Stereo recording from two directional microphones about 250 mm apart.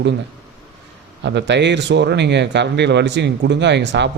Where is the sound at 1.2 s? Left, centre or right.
Right.